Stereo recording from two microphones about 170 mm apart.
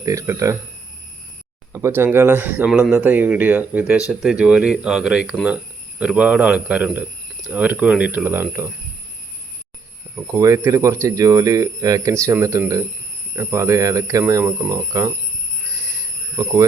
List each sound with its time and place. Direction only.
0.0 s speech: 20° right (ahead or behind)
1.7 s speech: 15° right (ahead or behind)
10.2 s speech: 15° right (ahead or behind)
16.4 s speech: 20° right (ahead or behind)